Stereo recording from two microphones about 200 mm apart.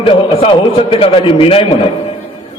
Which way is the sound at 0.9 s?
25° left (ahead or behind).